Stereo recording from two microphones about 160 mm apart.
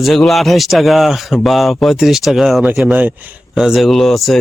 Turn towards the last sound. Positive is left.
turn(degrees=0)  # may be behind; listen again after turning